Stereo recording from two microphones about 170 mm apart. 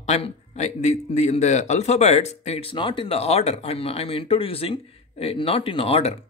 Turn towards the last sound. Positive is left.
turn(degrees=35)  # may be behind; listen again after turning